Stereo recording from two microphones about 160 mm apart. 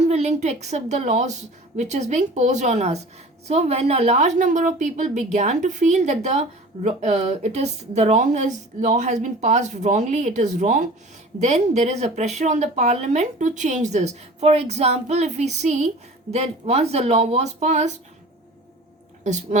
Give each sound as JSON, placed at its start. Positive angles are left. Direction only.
{"t": 0.0, "sound": "speech", "side_deg": -40}
{"t": 19.2, "sound": "speech", "side_deg": -45}